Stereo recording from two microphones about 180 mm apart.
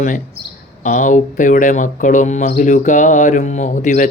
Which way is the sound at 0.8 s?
45° left (ahead or behind).